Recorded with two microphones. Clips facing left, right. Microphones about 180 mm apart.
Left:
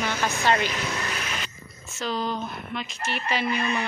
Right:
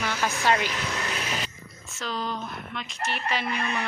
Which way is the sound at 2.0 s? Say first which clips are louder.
Left 3 dB; centre (ahead or behind).